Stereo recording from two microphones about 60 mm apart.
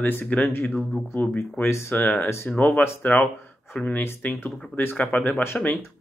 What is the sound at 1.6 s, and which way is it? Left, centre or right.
Speech, left.